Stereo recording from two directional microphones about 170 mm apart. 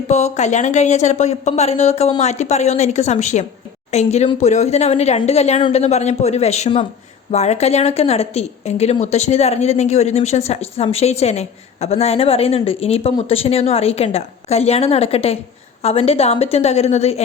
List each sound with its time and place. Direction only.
0.1 s a woman's voice: 40° left (ahead or behind)